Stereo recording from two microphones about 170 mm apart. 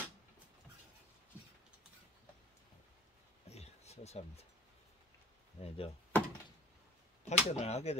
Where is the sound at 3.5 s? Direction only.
40° left (ahead or behind).